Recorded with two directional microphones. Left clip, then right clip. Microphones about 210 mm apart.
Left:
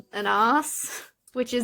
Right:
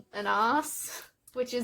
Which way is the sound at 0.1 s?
45° left (ahead or behind).